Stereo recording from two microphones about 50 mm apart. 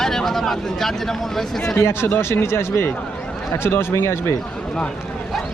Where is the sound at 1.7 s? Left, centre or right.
Left.